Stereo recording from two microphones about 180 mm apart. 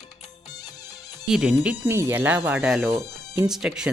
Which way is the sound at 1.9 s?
15° right (ahead or behind).